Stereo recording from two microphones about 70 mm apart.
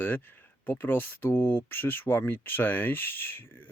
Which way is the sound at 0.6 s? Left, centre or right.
Left.